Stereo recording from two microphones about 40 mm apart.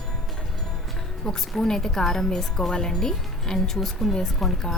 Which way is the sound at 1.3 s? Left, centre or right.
Centre.